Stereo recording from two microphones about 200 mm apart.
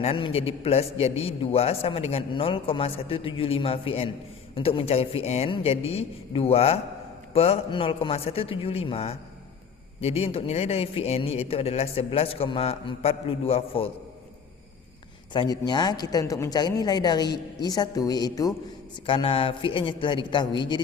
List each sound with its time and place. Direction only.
0.0 s a man's voice: 30° left (ahead or behind)
15.3 s a man's voice: 20° left (ahead or behind)